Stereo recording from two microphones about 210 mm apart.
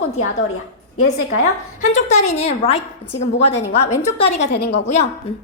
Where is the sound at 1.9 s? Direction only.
35° left (ahead or behind).